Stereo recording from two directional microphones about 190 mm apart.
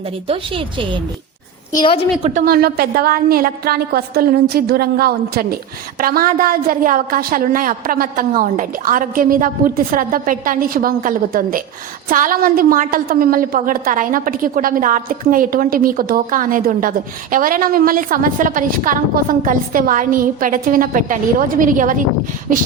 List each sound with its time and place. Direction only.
0.3 s a woman's voice: 30° right (ahead or behind)
2.2 s a woman's voice: 45° right (ahead or behind)